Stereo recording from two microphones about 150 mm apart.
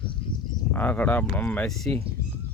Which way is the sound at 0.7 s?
10° left (ahead or behind).